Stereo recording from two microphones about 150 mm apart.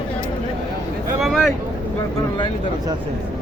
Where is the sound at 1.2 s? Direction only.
Centre (ahead or behind).